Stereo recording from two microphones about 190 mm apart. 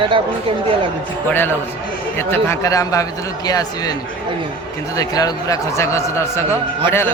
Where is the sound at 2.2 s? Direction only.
15° left (ahead or behind).